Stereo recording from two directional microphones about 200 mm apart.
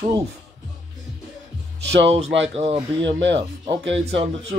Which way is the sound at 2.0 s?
30° right (ahead or behind).